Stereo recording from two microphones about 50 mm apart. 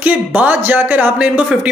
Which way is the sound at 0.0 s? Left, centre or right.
Right.